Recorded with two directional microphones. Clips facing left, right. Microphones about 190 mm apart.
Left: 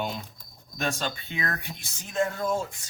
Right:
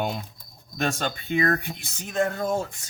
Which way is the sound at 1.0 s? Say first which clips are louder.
Right 7 dB; 50° right (ahead or behind).